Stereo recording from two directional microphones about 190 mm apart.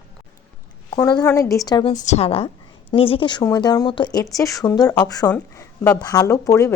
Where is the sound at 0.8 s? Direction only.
20° left (ahead or behind).